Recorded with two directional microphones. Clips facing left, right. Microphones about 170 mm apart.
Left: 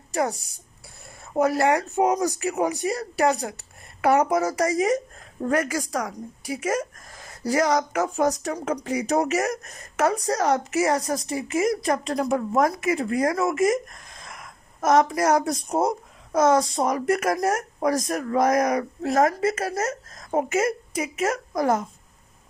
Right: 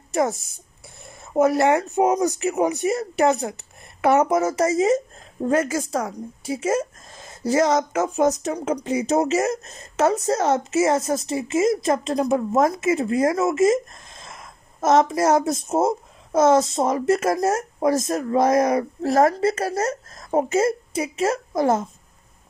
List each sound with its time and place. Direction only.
0.1 s speech: 25° right (ahead or behind)